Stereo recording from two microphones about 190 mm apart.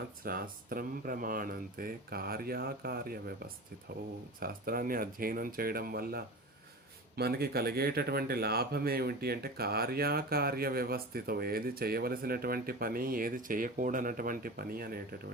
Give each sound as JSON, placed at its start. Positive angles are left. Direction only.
{"t": 0.3, "sound": "speech", "side_deg": -50}
{"t": 4.4, "sound": "speech", "side_deg": -50}